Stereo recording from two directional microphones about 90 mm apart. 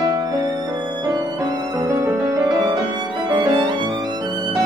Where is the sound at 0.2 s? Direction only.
45° right (ahead or behind).